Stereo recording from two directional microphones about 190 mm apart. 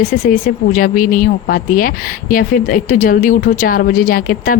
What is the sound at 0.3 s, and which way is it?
Speech, 45° left (ahead or behind).